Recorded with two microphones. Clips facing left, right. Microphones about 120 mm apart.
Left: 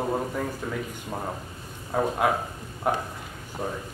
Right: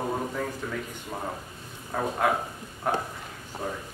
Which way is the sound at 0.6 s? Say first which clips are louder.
Left 2 dB; 5° left (ahead or behind).